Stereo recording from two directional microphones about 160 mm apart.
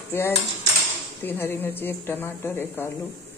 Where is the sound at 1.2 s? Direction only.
15° left (ahead or behind).